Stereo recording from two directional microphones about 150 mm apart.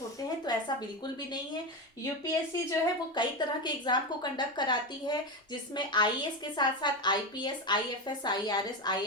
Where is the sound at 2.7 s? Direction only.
30° left (ahead or behind).